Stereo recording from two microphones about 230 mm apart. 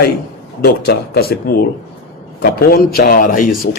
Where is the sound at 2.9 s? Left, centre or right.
Left.